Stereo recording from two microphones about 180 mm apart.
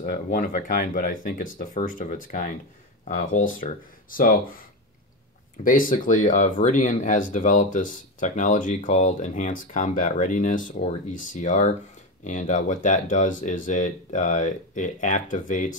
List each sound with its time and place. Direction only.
0.0 s speech: 50° left (ahead or behind)
5.6 s speech: 50° left (ahead or behind)